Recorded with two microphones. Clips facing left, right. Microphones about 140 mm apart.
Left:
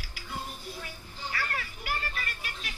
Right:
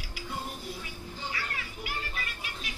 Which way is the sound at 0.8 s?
50° left (ahead or behind).